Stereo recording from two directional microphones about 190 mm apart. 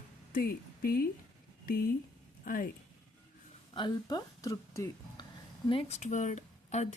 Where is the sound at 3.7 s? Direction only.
25° left (ahead or behind).